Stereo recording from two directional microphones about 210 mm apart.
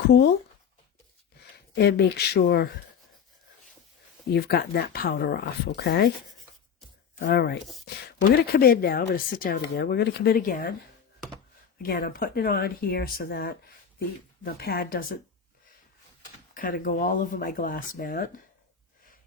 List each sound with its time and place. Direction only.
1.7 s a woman's voice: 50° left (ahead or behind)
4.3 s a woman's voice: 50° left (ahead or behind)
7.2 s a woman's voice: 45° left (ahead or behind)
11.8 s a woman's voice: 45° left (ahead or behind)
16.6 s a woman's voice: 45° left (ahead or behind)